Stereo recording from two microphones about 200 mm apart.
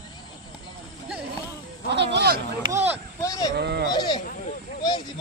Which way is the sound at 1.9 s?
60° right (ahead or behind).